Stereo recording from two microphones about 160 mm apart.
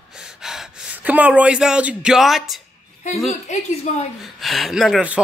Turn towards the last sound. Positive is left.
turn(degrees=-5)  # may be behind; listen again after turning